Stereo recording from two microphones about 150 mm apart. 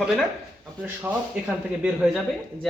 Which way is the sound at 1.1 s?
10° right (ahead or behind).